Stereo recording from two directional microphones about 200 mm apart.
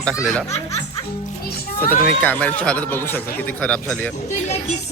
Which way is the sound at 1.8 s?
10° left (ahead or behind).